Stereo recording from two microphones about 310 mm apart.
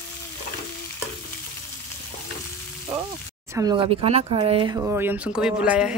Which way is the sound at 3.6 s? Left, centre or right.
Centre.